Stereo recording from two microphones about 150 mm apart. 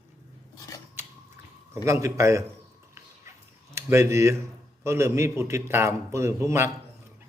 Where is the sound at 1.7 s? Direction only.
20° right (ahead or behind).